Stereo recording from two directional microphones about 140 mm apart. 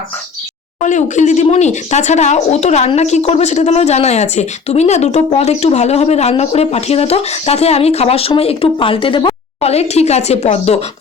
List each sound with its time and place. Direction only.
0.8 s speech: 60° left (ahead or behind)